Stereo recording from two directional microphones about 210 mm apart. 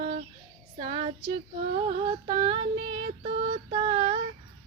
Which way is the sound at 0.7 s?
25° right (ahead or behind).